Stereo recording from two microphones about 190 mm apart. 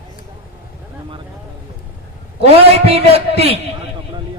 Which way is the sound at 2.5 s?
30° right (ahead or behind).